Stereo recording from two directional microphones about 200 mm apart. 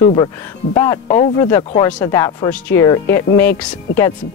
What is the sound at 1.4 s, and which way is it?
Speech, 20° left (ahead or behind).